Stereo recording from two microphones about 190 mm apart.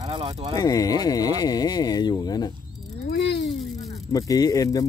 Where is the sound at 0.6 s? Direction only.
20° left (ahead or behind).